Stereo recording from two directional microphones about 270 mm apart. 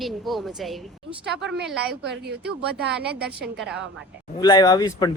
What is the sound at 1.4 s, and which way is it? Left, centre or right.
Speech, right.